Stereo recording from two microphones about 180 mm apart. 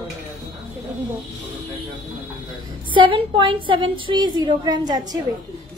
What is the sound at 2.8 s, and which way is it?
A woman's voice, 25° right (ahead or behind).